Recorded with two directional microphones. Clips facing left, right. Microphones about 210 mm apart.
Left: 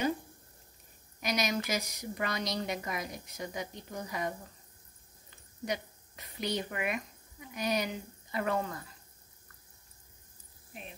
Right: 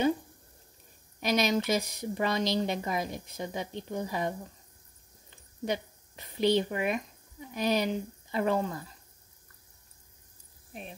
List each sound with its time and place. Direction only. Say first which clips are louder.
1.2 s a woman's voice: right 5 dB; 25° right (ahead or behind)
5.7 s speech: right 4 dB; 30° right (ahead or behind)